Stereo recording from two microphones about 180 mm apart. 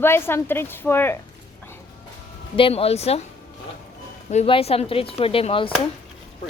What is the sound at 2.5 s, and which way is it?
Speech, 30° left (ahead or behind).